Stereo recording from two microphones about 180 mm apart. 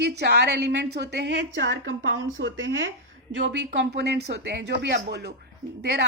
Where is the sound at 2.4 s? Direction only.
90° right.